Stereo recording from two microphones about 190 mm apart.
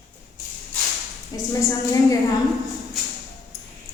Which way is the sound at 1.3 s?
20° left (ahead or behind).